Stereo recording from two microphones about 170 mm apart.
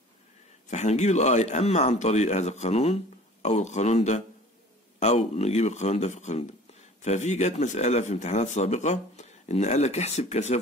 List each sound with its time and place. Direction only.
0.7 s speech: 40° left (ahead or behind)